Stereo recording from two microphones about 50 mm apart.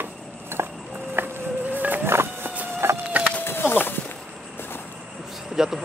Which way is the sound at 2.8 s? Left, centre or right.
Right.